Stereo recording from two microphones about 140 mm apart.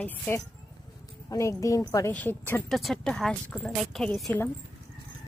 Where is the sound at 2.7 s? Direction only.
Centre (ahead or behind).